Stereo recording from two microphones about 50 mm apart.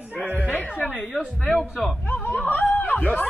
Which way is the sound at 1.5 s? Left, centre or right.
Centre.